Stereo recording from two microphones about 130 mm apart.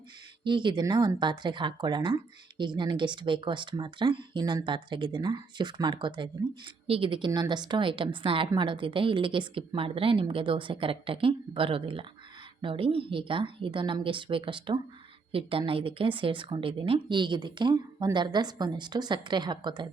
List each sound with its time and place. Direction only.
0.4 s a woman's voice: 40° right (ahead or behind)
7.3 s a woman's voice: 30° right (ahead or behind)